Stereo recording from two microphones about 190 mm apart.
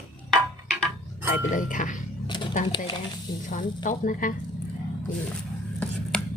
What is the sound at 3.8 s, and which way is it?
Speech, 45° left (ahead or behind).